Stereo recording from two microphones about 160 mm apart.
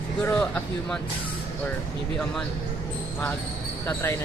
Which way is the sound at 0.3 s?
10° left (ahead or behind).